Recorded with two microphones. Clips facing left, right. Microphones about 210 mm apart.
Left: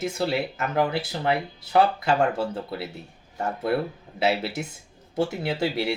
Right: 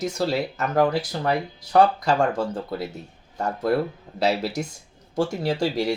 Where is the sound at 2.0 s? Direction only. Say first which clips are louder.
Right 1 dB; 45° right (ahead or behind).